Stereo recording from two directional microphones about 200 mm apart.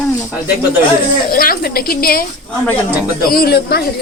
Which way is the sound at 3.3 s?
50° left (ahead or behind).